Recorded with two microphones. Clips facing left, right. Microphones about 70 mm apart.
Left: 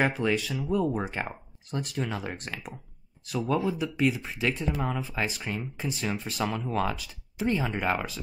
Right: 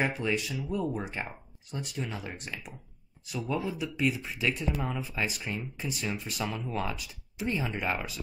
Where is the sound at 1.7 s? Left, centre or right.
Left.